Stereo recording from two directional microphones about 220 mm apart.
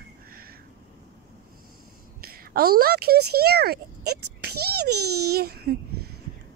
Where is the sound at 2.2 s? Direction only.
45° right (ahead or behind).